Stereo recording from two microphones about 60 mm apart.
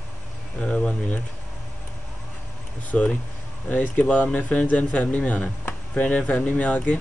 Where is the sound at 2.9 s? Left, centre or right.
Centre.